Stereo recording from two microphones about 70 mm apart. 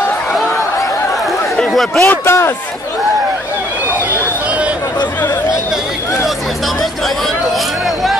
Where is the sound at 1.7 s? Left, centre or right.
Centre.